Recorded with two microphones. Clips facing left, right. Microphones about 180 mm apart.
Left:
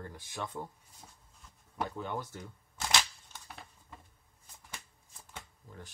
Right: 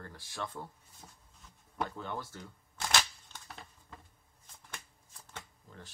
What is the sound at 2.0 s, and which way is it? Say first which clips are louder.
Speech: left 2 dB; 15° left (ahead or behind).